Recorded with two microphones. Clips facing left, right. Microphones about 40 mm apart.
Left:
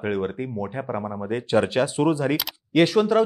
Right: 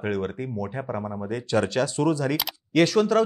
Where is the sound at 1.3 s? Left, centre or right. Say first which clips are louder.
Left 3 dB; left.